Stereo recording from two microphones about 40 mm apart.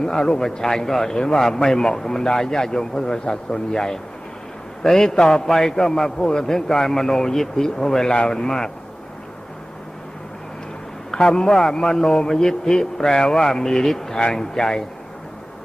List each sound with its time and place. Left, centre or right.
0.0 s a man's voice: centre
11.1 s a man's voice: centre